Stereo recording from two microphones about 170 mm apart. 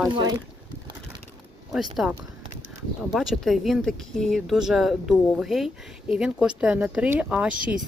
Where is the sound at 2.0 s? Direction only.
5° right (ahead or behind).